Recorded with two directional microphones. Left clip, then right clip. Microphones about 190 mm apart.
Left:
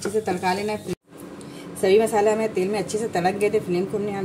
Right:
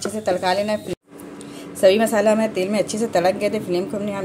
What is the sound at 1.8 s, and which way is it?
A woman's voice, 45° right (ahead or behind).